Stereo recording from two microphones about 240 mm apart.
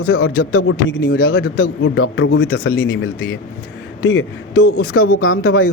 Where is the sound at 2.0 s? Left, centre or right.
Left.